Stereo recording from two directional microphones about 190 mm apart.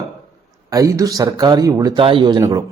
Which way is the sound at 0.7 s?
15° right (ahead or behind).